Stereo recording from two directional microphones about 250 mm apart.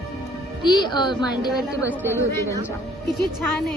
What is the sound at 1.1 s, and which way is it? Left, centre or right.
A woman's voice, centre.